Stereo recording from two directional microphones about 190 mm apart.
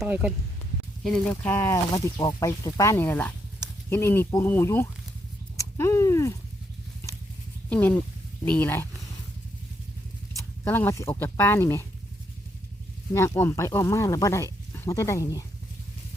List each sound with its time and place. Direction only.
0.0 s speech: 5° right (ahead or behind); by 4.9 s 10° left (ahead or behind)
5.5 s a sound: 15° left (ahead or behind)
7.7 s speech: 10° left (ahead or behind)
10.6 s speech: 10° left (ahead or behind)
13.1 s speech: 15° left (ahead or behind)